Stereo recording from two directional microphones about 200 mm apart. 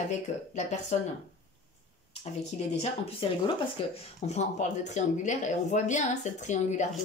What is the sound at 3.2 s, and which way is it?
A woman's voice, 30° left (ahead or behind).